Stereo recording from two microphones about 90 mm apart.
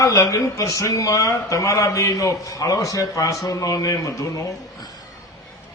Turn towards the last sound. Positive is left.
turn(degrees=35)  # may be behind; listen again after turning